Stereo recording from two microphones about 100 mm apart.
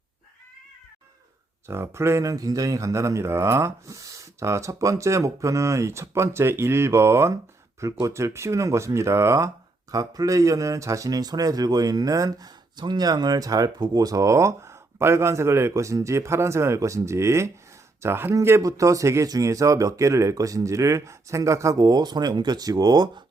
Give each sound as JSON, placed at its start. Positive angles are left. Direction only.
{"t": 1.6, "sound": "speech", "side_deg": -25}